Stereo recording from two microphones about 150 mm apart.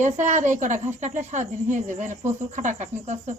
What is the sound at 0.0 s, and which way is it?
A woman's voice, 55° right (ahead or behind).